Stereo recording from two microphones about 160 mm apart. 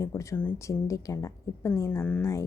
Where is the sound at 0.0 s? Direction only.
20° left (ahead or behind).